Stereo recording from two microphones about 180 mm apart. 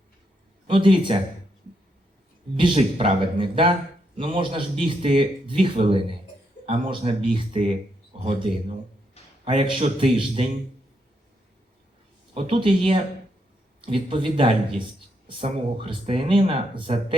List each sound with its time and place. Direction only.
0.7 s speech: 30° right (ahead or behind)
2.6 s speech: 30° right (ahead or behind)
12.3 s speech: 30° right (ahead or behind)